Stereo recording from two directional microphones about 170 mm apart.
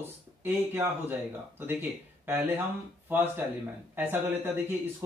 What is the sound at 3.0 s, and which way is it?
Speech, 10° right (ahead or behind).